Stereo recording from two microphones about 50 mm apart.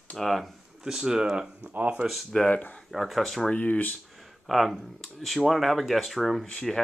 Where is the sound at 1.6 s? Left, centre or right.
Right.